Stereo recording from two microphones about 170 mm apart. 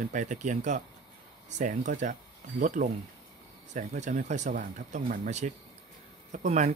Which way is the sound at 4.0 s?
45° right (ahead or behind).